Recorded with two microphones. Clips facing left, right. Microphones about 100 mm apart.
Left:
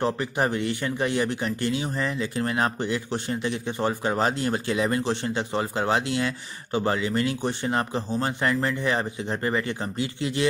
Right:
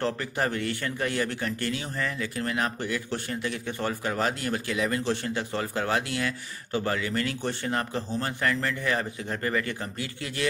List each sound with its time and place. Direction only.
0.0 s speech: 20° left (ahead or behind)